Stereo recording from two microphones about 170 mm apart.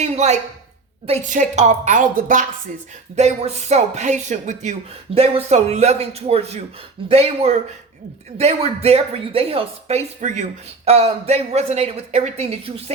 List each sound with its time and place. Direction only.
0.0 s a woman's voice: 40° right (ahead or behind)
3.2 s speech: 40° right (ahead or behind)